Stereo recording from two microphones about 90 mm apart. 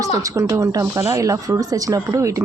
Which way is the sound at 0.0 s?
35° right (ahead or behind).